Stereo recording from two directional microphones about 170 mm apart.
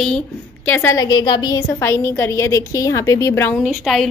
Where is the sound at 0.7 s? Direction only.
15° left (ahead or behind).